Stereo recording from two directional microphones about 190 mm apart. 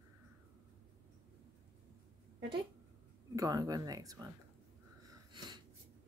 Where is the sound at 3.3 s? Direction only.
20° right (ahead or behind).